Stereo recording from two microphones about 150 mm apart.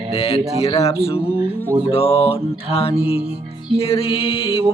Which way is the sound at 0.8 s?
40° left (ahead or behind).